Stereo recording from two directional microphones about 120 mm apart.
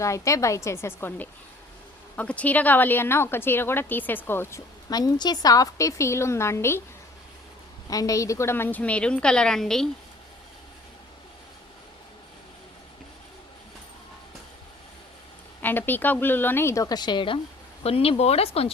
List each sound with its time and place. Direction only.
0.0 s a woman's voice: 25° left (ahead or behind)
4.9 s a woman's voice: 35° left (ahead or behind)
7.9 s speech: 30° left (ahead or behind); by 9.9 s 5° left (ahead or behind)
15.6 s a woman's voice: 15° left (ahead or behind); by 18.7 s 55° left (ahead or behind)